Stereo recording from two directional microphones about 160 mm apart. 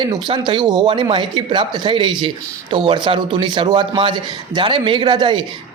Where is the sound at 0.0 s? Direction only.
25° right (ahead or behind).